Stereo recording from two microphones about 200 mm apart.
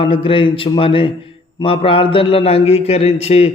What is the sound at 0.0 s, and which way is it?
A man's voice, 25° left (ahead or behind).